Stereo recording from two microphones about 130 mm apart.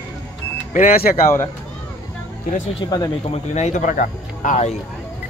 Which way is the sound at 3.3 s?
60° left (ahead or behind).